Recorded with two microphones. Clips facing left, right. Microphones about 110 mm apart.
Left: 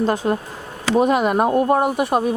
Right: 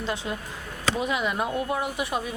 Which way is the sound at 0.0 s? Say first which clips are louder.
Left 11 dB; 45° left (ahead or behind).